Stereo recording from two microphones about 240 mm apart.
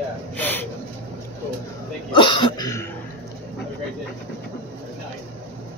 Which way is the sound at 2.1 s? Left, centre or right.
Left.